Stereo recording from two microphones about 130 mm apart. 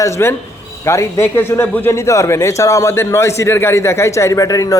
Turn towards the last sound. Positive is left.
turn(degrees=25)  # may be behind; listen again after turning